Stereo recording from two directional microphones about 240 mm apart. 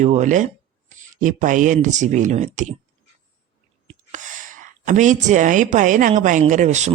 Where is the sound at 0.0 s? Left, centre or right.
Right.